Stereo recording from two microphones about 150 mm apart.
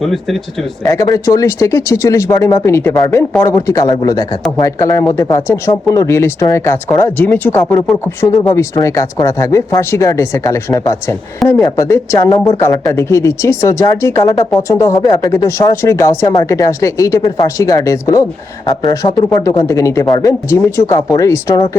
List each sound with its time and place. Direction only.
0.0 s speech: centre (ahead or behind)
0.9 s speech: 25° left (ahead or behind)